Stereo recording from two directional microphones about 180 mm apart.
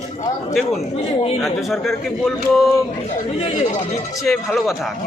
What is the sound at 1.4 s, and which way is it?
A man's voice, centre (ahead or behind).